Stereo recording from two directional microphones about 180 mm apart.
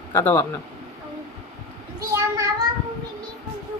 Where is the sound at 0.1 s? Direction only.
10° left (ahead or behind).